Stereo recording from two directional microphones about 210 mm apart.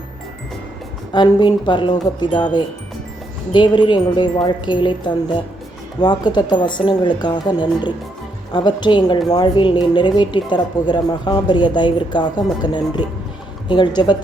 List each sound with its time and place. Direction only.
1.1 s speech: 20° left (ahead or behind)